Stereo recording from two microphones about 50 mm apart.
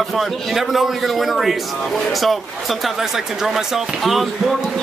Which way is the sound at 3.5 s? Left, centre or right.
Centre.